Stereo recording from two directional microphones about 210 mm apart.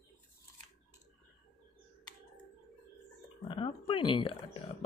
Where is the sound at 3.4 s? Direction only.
25° left (ahead or behind).